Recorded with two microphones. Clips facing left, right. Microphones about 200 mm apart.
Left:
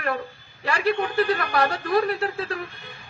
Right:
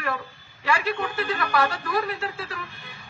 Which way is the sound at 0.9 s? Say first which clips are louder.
Left 6 dB; 40° left (ahead or behind).